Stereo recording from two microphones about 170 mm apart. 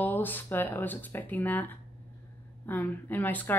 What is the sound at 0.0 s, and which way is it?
Speech, 10° left (ahead or behind).